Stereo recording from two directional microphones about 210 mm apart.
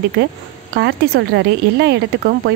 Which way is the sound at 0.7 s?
55° right (ahead or behind).